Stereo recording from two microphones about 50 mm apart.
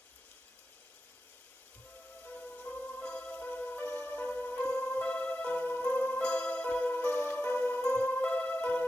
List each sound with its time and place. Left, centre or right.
2.2 s music: left
4.6 s music: left
7.9 s music: left